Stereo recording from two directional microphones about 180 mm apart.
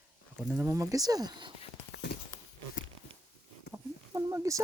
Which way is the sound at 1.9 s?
65° left (ahead or behind).